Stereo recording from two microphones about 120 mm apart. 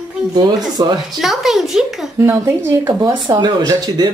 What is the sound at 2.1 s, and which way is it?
Speech, 25° right (ahead or behind).